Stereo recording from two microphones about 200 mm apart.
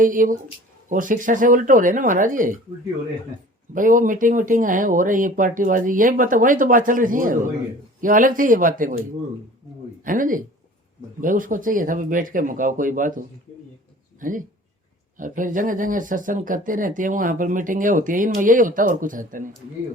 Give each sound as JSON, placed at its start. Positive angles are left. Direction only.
{"t": 0.0, "sound": "speech", "side_deg": -40}
{"t": 3.8, "sound": "speech", "side_deg": -40}
{"t": 10.0, "sound": "speech", "side_deg": -40}